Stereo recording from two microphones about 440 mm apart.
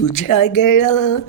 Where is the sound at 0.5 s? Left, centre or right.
Left.